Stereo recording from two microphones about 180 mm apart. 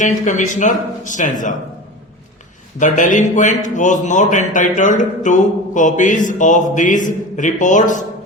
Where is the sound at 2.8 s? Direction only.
45° left (ahead or behind).